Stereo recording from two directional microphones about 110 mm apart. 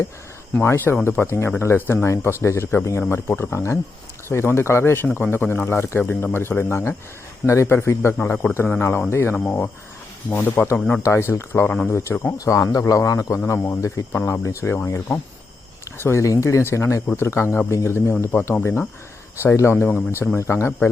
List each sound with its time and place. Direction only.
0.5 s a man's voice: 20° left (ahead or behind)
11.0 s a man's voice: 25° left (ahead or behind)